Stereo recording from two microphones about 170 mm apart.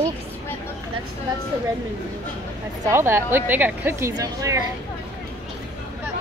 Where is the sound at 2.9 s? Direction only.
15° right (ahead or behind).